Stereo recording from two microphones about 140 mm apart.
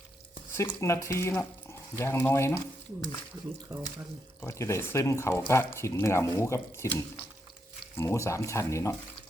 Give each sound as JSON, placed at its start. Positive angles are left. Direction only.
{"t": 0.5, "sound": "speech", "side_deg": 20}
{"t": 4.4, "sound": "speech", "side_deg": 20}
{"t": 7.9, "sound": "speech", "side_deg": 20}